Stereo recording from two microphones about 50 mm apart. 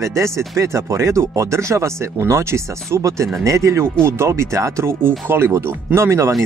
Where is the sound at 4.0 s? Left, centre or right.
Right.